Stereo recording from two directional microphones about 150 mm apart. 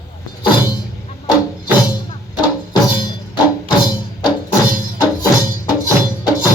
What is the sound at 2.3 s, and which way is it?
Music, 30° left (ahead or behind).